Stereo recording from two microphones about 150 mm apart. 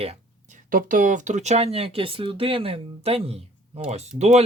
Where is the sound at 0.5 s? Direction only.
65° right (ahead or behind).